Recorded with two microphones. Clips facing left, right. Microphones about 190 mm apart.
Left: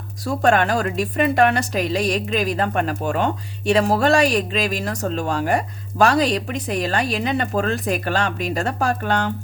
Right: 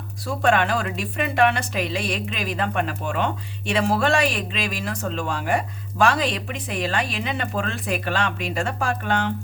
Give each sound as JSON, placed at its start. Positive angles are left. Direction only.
{"t": 0.3, "sound": "speech", "side_deg": 40}